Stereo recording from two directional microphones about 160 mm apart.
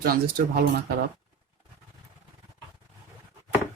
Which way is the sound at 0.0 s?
65° right (ahead or behind).